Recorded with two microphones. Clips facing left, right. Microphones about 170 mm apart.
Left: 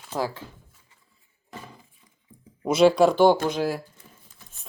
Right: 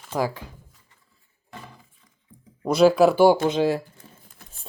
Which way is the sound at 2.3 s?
5° left (ahead or behind).